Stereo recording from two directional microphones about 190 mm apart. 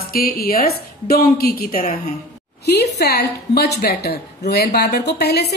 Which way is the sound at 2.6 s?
60° left (ahead or behind).